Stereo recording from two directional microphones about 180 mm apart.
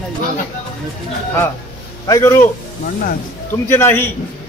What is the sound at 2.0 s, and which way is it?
Speech, 15° left (ahead or behind).